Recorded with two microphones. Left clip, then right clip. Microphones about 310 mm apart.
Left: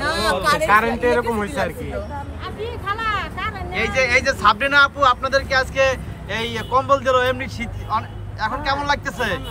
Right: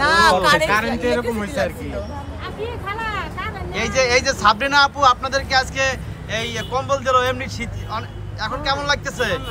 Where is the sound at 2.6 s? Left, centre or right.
Centre.